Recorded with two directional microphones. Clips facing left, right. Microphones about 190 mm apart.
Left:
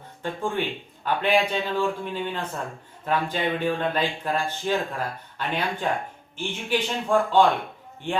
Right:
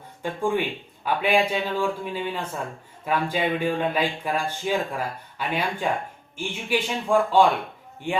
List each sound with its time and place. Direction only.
0.2 s speech: 10° right (ahead or behind)